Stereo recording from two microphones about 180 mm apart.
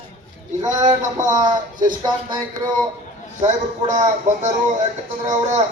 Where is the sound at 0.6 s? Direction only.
20° right (ahead or behind).